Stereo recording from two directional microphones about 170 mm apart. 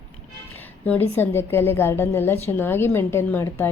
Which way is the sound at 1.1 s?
15° left (ahead or behind).